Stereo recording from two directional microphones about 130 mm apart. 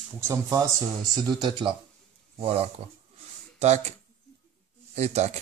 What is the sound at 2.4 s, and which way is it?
Speech, 50° right (ahead or behind).